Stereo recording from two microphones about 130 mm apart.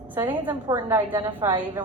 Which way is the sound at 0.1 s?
15° right (ahead or behind).